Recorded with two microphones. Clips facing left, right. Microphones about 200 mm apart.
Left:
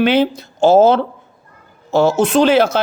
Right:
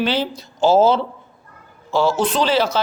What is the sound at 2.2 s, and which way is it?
Speech, 50° left (ahead or behind).